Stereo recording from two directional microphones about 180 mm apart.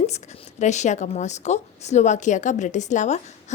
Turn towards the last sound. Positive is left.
turn(degrees=40)  # may be behind; listen again after turning